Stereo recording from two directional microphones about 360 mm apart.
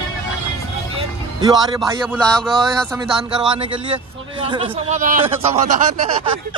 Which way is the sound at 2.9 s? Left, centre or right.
Centre.